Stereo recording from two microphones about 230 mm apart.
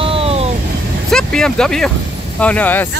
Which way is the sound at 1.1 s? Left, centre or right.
Centre.